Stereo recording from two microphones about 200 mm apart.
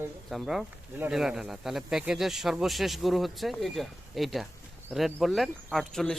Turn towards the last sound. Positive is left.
turn(degrees=0)  # may be behind; listen again after turning